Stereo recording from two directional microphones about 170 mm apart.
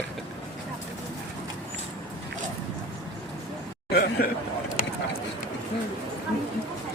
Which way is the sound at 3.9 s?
65° left (ahead or behind).